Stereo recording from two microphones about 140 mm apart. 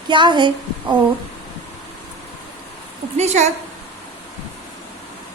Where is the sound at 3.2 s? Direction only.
55° right (ahead or behind).